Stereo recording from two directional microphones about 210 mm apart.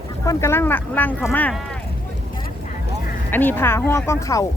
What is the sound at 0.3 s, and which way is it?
Speech, 15° left (ahead or behind).